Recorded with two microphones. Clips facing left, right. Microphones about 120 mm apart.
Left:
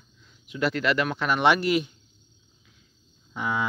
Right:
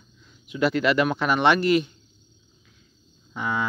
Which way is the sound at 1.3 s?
5° left (ahead or behind).